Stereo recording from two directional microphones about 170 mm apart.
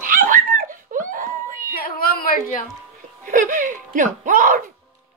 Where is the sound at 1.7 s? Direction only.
60° left (ahead or behind).